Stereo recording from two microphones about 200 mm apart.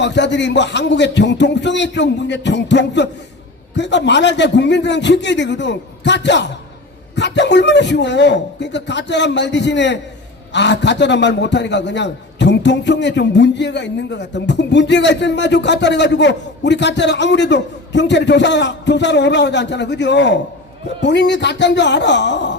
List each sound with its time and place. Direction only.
0.0 s a man's voice: 60° left (ahead or behind)